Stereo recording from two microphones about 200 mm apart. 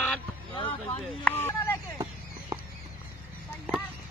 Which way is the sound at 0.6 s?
25° left (ahead or behind).